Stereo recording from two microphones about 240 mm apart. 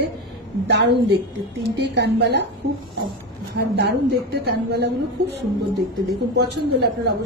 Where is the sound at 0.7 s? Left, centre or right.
Right.